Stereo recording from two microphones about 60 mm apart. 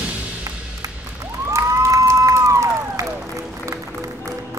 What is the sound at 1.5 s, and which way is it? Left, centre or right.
Crowd, right.